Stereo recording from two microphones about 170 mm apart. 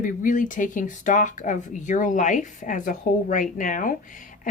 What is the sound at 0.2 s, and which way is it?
Speech, 50° left (ahead or behind).